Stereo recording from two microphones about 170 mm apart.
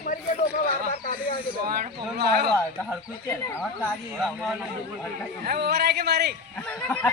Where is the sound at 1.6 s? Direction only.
55° right (ahead or behind).